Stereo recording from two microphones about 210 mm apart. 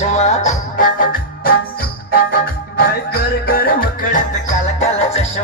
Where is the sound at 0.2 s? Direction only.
30° left (ahead or behind).